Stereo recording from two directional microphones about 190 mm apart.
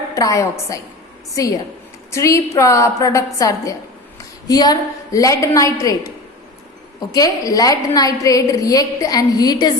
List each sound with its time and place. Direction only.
0.1 s a woman's voice: 15° left (ahead or behind)
2.0 s a woman's voice: 15° left (ahead or behind)
7.1 s a woman's voice: 20° left (ahead or behind)